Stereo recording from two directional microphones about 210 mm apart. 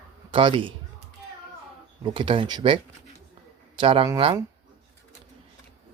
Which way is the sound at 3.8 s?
25° right (ahead or behind).